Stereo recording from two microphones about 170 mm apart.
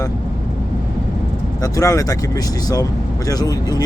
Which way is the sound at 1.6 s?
20° left (ahead or behind).